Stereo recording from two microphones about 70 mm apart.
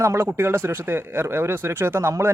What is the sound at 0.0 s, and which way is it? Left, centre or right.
A man's voice, right.